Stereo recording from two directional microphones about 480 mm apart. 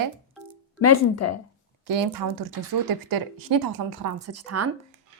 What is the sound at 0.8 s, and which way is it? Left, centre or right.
Speech, left.